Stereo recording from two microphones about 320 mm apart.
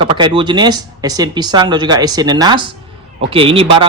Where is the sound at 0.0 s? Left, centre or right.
Centre.